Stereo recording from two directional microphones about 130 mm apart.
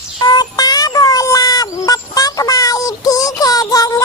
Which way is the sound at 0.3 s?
30° left (ahead or behind).